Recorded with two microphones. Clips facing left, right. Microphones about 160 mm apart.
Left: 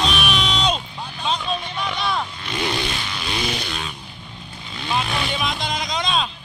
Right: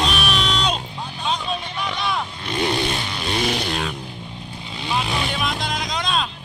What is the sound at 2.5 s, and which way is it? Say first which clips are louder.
Vehicle: right 3 dB; 35° right (ahead or behind).